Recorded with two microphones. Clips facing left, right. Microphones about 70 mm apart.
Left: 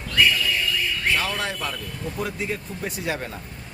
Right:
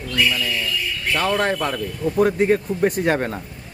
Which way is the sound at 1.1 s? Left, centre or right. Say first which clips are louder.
Right 6 dB; right.